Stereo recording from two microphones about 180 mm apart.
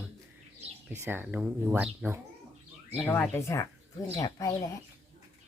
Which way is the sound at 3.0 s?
10° left (ahead or behind).